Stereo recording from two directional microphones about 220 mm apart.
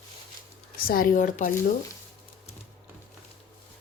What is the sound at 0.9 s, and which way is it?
Speech, 40° left (ahead or behind).